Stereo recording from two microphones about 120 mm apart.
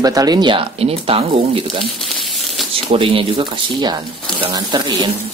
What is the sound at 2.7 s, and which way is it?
Speech, 45° right (ahead or behind).